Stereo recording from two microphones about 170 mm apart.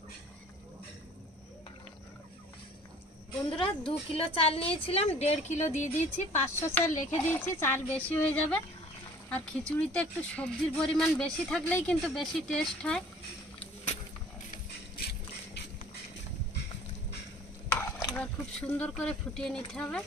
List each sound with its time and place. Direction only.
3.4 s speech: 30° left (ahead or behind)
7.2 s speech: 15° left (ahead or behind)
14.5 s a sound: 65° left (ahead or behind)
17.6 s stir: 15° left (ahead or behind)
18.0 s speech: 5° left (ahead or behind)